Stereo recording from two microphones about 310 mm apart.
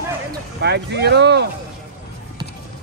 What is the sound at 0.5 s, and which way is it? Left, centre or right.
Speech, right.